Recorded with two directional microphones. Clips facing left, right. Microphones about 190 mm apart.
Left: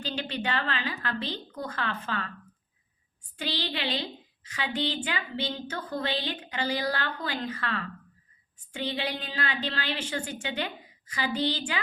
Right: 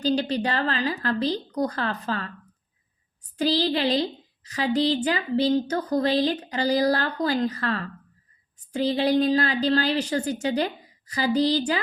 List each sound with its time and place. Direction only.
0.0 s a woman's voice: 40° right (ahead or behind)
3.3 s a woman's voice: 35° right (ahead or behind)